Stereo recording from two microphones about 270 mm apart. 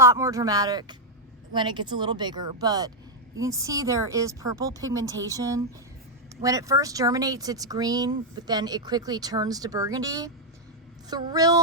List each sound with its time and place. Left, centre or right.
0.0 s speech: centre